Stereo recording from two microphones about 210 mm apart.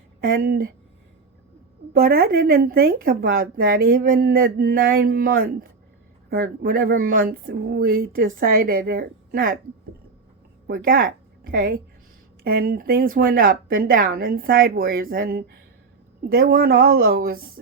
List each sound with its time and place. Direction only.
0.2 s speech: 45° right (ahead or behind)
1.9 s speech: 45° right (ahead or behind)
10.7 s speech: 45° right (ahead or behind)